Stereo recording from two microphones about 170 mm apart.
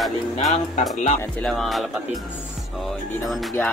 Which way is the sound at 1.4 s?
Centre (ahead or behind).